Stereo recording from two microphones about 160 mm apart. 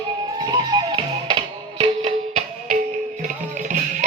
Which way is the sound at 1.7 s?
40° right (ahead or behind).